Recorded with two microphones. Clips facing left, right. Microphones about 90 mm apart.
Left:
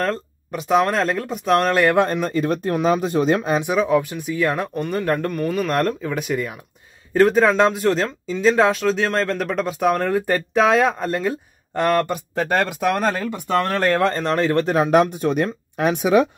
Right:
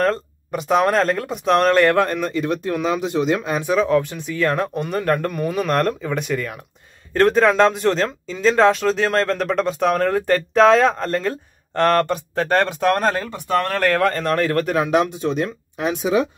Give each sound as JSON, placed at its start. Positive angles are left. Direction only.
{"t": 0.0, "sound": "speech", "side_deg": 0}
{"t": 2.0, "sound": "speech", "side_deg": 20}
{"t": 2.2, "sound": "speech", "side_deg": 40}
{"t": 3.6, "sound": "speech", "side_deg": 10}
{"t": 4.7, "sound": "speech", "side_deg": -5}
{"t": 13.5, "sound": "speech", "side_deg": 25}
{"t": 14.9, "sound": "speech", "side_deg": 50}